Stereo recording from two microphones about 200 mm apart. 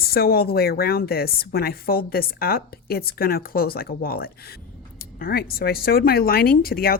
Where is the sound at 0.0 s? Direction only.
50° left (ahead or behind).